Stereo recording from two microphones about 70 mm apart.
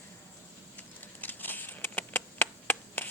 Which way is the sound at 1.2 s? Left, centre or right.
Left.